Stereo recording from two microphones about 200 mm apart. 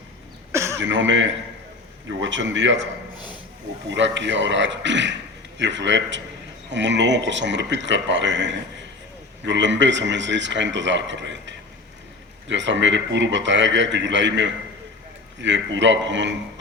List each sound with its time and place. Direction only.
0.5 s throat clearing: 15° right (ahead or behind)
0.8 s speech: 65° right (ahead or behind)
3.2 s a sound: 20° left (ahead or behind)
3.8 s a man's voice: 65° right (ahead or behind)